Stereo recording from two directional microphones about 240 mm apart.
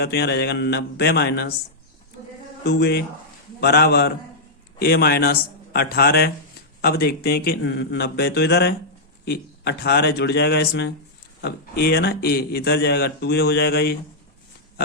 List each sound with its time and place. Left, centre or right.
0.0 s a man's voice: left
2.6 s a man's voice: left